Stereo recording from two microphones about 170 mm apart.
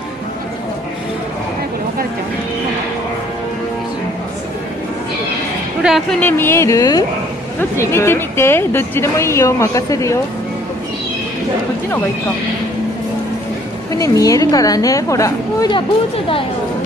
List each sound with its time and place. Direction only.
5.8 s a woman's voice: centre (ahead or behind); by 10.1 s 20° left (ahead or behind)
13.9 s a woman's voice: 20° left (ahead or behind)